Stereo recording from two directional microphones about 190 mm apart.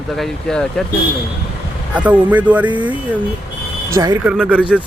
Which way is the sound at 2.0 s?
10° right (ahead or behind).